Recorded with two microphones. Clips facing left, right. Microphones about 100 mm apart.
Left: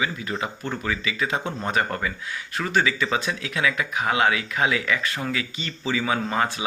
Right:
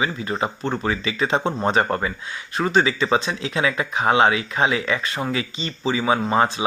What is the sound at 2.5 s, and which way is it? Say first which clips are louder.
Speech: right 4 dB; 20° right (ahead or behind).